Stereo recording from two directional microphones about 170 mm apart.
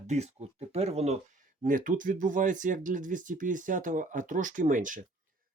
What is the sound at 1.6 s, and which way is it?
Speech, 50° right (ahead or behind).